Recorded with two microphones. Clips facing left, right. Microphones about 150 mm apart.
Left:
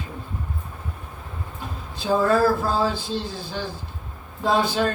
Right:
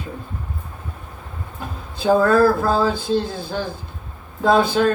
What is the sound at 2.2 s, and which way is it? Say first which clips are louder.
Speech: right 2 dB; 55° right (ahead or behind).